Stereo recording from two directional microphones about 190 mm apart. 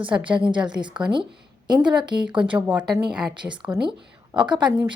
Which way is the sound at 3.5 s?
25° right (ahead or behind).